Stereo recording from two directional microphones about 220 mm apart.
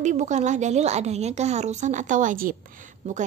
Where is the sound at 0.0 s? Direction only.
30° right (ahead or behind).